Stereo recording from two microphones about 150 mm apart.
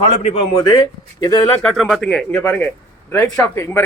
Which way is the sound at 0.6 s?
30° left (ahead or behind).